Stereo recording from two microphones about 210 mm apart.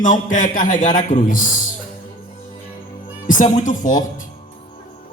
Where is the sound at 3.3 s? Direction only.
40° left (ahead or behind).